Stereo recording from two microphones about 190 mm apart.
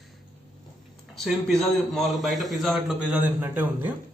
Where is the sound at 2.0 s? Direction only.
Centre (ahead or behind).